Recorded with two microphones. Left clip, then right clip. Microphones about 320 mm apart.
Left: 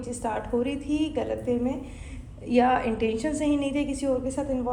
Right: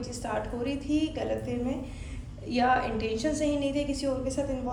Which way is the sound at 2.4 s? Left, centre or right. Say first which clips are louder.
Left 3 dB; left.